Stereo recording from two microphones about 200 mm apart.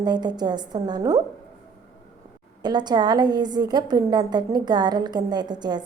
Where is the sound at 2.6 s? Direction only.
20° right (ahead or behind).